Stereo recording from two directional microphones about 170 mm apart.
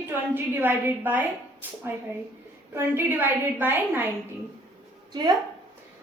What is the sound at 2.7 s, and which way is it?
A woman's voice, 10° right (ahead or behind).